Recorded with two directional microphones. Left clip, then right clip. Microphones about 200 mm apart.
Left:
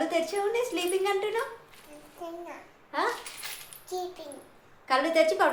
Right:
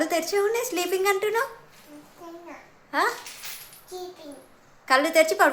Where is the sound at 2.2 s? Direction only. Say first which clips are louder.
Left 4 dB; 20° left (ahead or behind).